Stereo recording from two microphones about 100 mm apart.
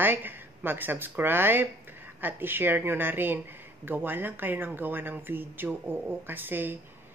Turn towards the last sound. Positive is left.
turn(degrees=-20)  # may be behind; listen again after turning